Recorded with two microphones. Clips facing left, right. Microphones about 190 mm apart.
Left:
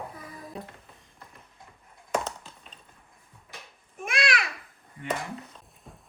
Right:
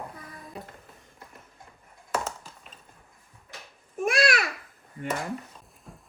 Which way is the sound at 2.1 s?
Centre (ahead or behind).